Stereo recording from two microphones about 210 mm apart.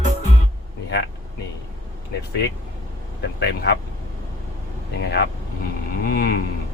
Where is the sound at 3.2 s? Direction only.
55° left (ahead or behind).